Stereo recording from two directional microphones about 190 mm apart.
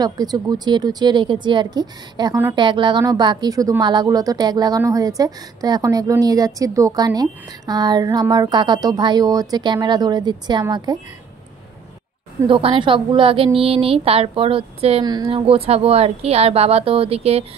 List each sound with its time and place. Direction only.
0.0 s speech: 20° right (ahead or behind)
12.4 s speech: 25° right (ahead or behind)